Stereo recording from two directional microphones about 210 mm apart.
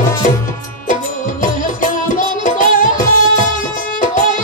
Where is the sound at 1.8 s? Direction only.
40° left (ahead or behind).